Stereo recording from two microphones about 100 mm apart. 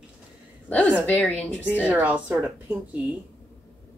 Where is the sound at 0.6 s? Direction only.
15° left (ahead or behind).